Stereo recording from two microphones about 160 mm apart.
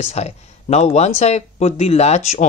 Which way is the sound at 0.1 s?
40° left (ahead or behind).